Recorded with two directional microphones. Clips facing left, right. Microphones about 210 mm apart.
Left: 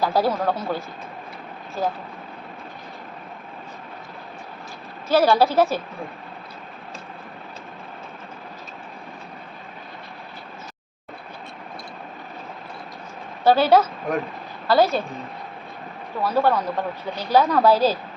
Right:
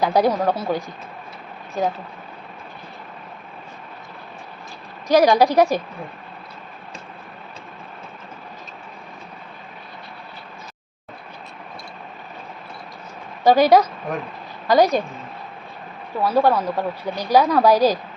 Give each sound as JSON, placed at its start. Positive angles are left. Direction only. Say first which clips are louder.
{"t": 0.0, "sound": "speech", "louder": "right 3 dB", "side_deg": -20}
{"t": 5.0, "sound": "speech", "louder": "right 3 dB", "side_deg": -15}
{"t": 13.4, "sound": "speech", "louder": "right 2 dB", "side_deg": -15}
{"t": 16.2, "sound": "speech", "louder": "right 3 dB", "side_deg": -10}